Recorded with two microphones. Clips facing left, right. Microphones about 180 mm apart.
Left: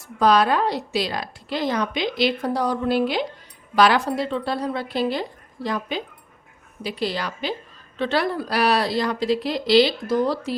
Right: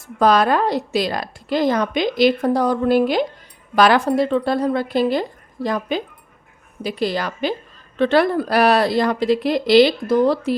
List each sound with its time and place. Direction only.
0.2 s a woman's voice: 50° right (ahead or behind)